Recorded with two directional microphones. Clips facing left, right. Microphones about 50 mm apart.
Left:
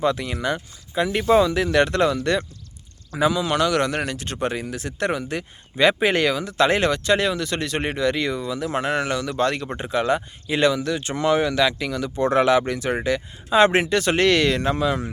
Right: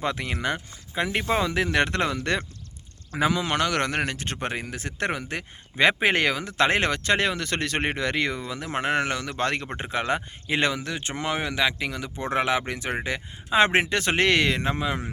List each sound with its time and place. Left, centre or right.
0.0 s speech: right